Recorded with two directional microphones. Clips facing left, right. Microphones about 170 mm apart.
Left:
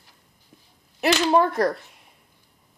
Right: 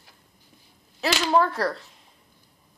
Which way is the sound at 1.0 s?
15° left (ahead or behind).